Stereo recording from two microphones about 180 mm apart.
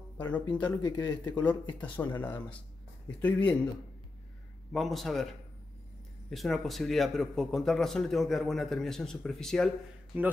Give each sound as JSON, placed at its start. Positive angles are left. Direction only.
{"t": 0.5, "sound": "speech", "side_deg": 25}
{"t": 1.4, "sound": "speech", "side_deg": 10}
{"t": 4.7, "sound": "a man's voice", "side_deg": 0}
{"t": 6.3, "sound": "a man's voice", "side_deg": 0}
{"t": 10.1, "sound": "a man's voice", "side_deg": -10}